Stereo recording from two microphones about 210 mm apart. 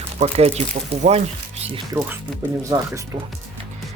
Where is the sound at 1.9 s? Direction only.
10° right (ahead or behind).